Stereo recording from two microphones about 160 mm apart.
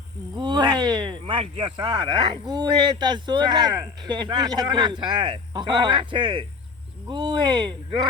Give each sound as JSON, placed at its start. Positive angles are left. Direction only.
{"t": 0.3, "sound": "speech", "side_deg": -25}